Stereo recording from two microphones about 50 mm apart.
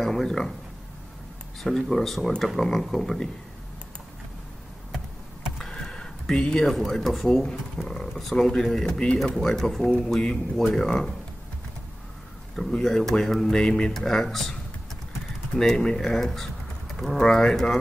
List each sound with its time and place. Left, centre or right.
0.0 s speech: centre
1.6 s speech: centre
5.6 s a sound: centre
7.3 s speech: centre
12.7 s speech: centre
15.6 s speech: centre